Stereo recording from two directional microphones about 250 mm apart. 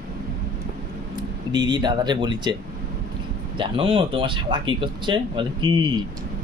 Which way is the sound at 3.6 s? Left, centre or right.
Right.